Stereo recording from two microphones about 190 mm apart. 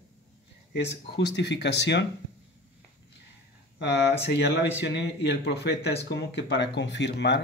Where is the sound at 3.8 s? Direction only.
65° left (ahead or behind).